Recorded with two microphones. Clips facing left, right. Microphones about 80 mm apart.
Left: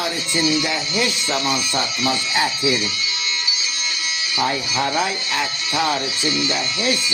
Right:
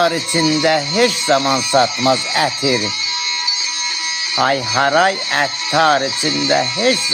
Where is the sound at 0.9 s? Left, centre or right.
Right.